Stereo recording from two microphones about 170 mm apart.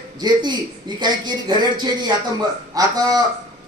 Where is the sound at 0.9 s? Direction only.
25° right (ahead or behind).